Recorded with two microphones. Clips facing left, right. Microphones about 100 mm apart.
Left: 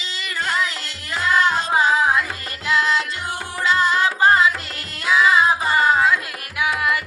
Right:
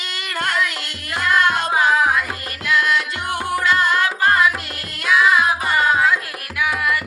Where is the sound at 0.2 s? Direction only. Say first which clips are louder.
Right 1 dB; 55° right (ahead or behind).